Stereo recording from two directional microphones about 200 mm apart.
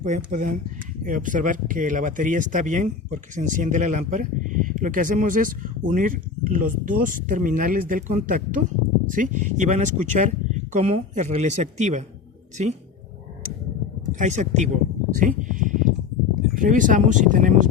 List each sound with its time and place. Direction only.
0.3 s speech: 35° right (ahead or behind)
14.1 s speech: 35° right (ahead or behind)
15.1 s a sound: 40° right (ahead or behind)
16.6 s speech: 40° right (ahead or behind)